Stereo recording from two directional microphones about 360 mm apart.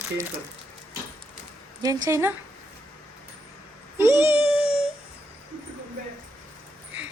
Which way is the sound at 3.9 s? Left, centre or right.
Centre.